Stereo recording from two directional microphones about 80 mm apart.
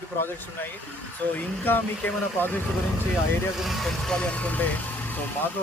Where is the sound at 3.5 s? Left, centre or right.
Centre.